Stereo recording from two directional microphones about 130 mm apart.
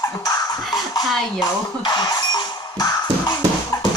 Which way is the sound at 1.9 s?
30° left (ahead or behind).